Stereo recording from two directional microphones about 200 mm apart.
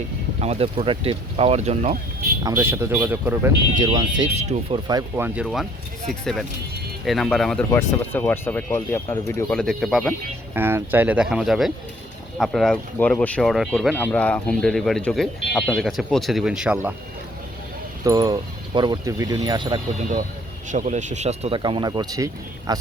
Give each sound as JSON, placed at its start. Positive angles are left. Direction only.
{"t": 0.3, "sound": "speech", "side_deg": -30}
{"t": 2.4, "sound": "speech", "side_deg": -10}
{"t": 3.8, "sound": "speech", "side_deg": -20}
{"t": 4.4, "sound": "speech", "side_deg": -35}
{"t": 4.9, "sound": "speech", "side_deg": -15}
{"t": 9.5, "sound": "speech", "side_deg": 0}
{"t": 10.5, "sound": "speech", "side_deg": -10}
{"t": 18.0, "sound": "speech", "side_deg": -20}
{"t": 20.7, "sound": "speech", "side_deg": -40}